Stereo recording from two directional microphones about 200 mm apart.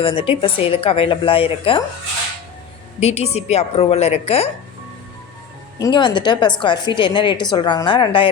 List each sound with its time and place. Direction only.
0.0 s a woman's voice: 25° left (ahead or behind)
3.0 s a woman's voice: 30° left (ahead or behind)
5.8 s a woman's voice: 20° left (ahead or behind)